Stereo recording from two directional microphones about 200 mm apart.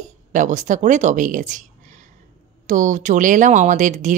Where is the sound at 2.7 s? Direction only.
40° right (ahead or behind).